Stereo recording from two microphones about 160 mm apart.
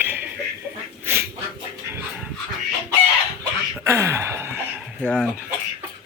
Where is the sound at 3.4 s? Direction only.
15° right (ahead or behind).